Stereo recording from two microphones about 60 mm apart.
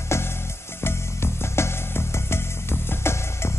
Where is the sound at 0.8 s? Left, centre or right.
Left.